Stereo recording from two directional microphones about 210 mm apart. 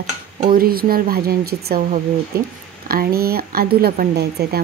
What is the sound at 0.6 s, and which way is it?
Speech, 45° right (ahead or behind).